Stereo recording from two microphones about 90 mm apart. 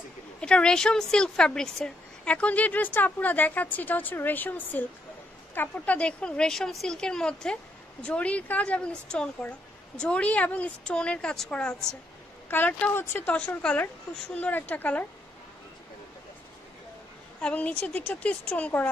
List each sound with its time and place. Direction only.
0.4 s a woman's voice: 10° left (ahead or behind)
12.4 s a woman's voice: 20° left (ahead or behind)
17.4 s a woman's voice: 15° left (ahead or behind)